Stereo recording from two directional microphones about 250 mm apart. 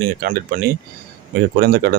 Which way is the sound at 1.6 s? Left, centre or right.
Right.